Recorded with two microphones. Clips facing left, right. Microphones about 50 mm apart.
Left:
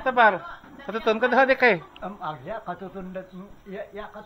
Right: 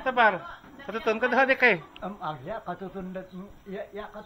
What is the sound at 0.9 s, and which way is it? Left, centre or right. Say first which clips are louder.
Speech: left 4 dB; right.